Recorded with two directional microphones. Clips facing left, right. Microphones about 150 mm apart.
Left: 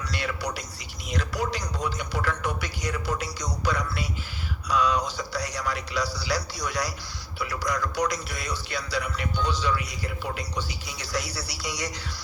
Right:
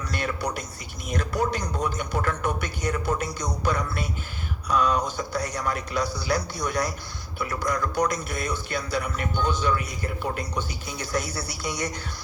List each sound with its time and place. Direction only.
0.1 s a man's voice: 50° right (ahead or behind)